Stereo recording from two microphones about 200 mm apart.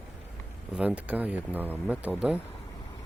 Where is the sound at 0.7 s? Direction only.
5° right (ahead or behind).